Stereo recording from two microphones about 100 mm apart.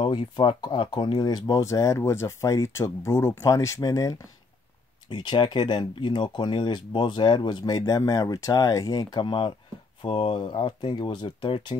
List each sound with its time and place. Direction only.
0.0 s speech: 60° left (ahead or behind); by 1.6 s 45° left (ahead or behind)
1.6 s speech: 30° left (ahead or behind)
5.1 s speech: 50° left (ahead or behind)
10.0 s speech: 65° left (ahead or behind)
10.4 s speech: 50° left (ahead or behind)